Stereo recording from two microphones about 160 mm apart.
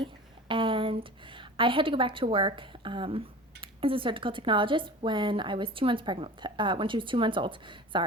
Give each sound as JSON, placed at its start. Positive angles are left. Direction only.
{"t": 0.0, "sound": "a woman's voice", "side_deg": -30}